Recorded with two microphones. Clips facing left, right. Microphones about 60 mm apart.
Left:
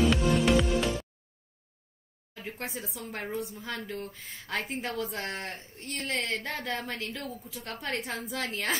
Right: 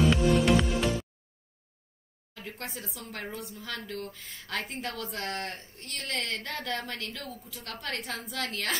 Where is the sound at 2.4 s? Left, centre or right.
Centre.